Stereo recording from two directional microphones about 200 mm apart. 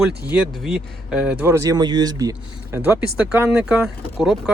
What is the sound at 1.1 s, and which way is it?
Speech, 5° right (ahead or behind).